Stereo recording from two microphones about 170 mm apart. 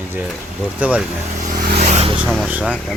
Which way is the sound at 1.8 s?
45° right (ahead or behind).